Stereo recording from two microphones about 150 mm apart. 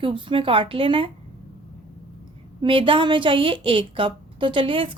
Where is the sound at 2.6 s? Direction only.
35° right (ahead or behind).